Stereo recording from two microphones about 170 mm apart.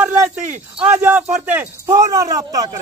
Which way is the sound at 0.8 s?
10° right (ahead or behind).